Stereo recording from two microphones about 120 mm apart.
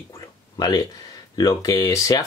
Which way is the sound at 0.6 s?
35° left (ahead or behind).